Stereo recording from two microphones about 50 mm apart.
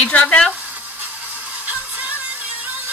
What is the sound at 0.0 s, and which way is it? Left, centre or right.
Speech, left.